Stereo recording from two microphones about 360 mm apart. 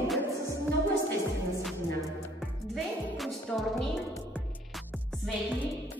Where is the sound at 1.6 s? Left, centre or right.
Centre.